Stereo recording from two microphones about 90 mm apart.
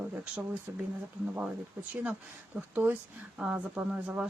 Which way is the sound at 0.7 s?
30° right (ahead or behind).